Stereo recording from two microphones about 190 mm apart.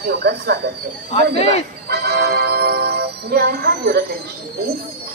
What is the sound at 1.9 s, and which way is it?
Music, 55° right (ahead or behind).